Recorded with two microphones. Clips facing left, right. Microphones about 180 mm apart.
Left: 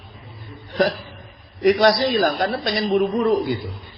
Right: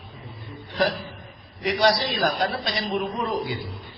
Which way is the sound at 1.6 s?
55° left (ahead or behind).